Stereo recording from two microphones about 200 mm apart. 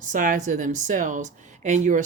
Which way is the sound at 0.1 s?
40° right (ahead or behind).